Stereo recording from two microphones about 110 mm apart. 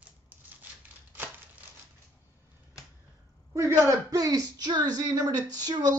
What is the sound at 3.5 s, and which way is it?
Speech, 25° right (ahead or behind).